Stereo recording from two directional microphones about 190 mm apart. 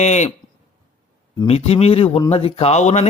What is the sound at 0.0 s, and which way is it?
Speech, 35° left (ahead or behind).